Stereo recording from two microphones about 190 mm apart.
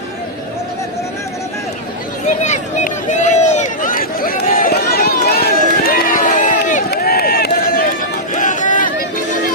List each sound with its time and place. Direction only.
2.2 s run: 40° left (ahead or behind)
6.9 s run: 55° left (ahead or behind)